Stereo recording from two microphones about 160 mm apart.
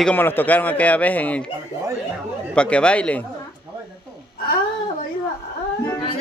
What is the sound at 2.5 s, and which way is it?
Speech, 5° left (ahead or behind).